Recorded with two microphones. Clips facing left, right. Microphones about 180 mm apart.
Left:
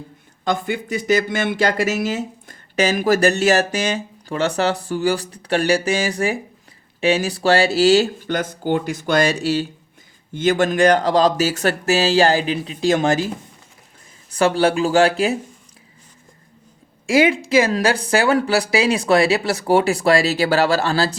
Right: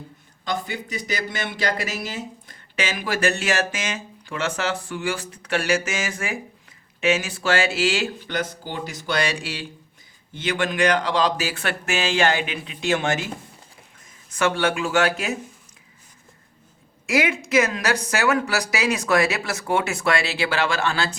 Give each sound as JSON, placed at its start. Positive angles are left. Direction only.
{"t": 0.4, "sound": "speech", "side_deg": 50}
{"t": 17.1, "sound": "speech", "side_deg": 30}